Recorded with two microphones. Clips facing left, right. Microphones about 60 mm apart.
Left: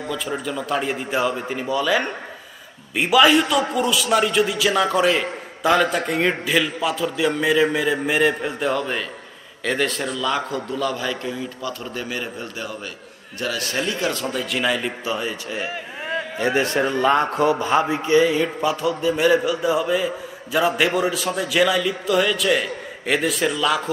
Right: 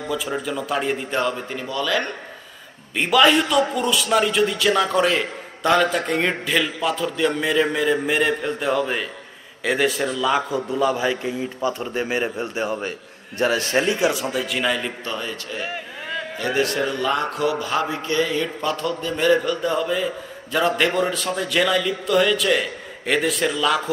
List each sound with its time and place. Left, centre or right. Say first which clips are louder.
0.1 s a man's voice: right 2 dB; centre
2.9 s a man's voice: left 1 dB; centre